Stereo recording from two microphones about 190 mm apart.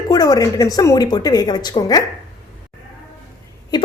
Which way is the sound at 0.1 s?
20° left (ahead or behind).